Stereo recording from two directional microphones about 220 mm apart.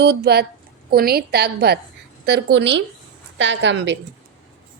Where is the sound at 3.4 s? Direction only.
55° right (ahead or behind).